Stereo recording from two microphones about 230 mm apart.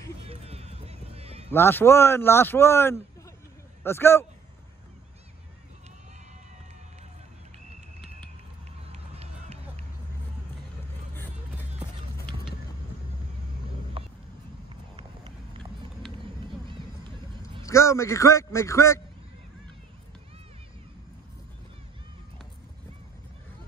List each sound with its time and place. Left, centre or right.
0.3 s a sound: right
1.5 s speech: centre
8.9 s run: right
14.0 s vehicle: right
17.6 s speech: centre